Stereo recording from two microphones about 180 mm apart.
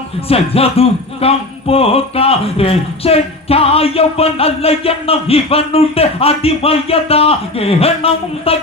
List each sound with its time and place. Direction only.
0.3 s music: 35° left (ahead or behind)